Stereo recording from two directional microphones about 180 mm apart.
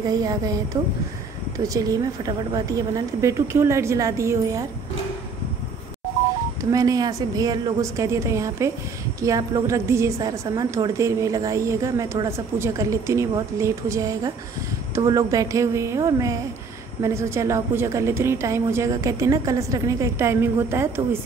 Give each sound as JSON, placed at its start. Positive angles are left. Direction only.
{"t": 0.1, "sound": "speech", "side_deg": -20}
{"t": 1.6, "sound": "a woman's voice", "side_deg": -20}
{"t": 6.6, "sound": "a woman's voice", "side_deg": -20}